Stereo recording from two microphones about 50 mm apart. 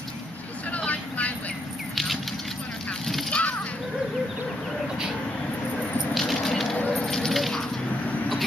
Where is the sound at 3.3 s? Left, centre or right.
Left.